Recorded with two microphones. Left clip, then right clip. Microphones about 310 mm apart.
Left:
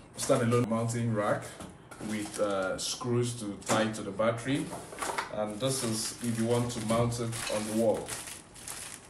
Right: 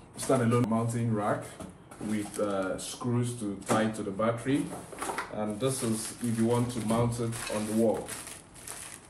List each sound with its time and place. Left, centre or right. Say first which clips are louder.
0.2 s speech: even; centre